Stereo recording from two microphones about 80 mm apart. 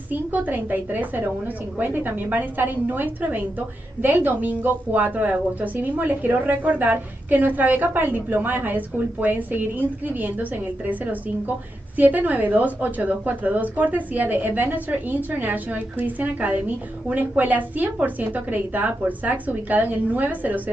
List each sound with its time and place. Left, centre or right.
0.1 s a woman's voice: right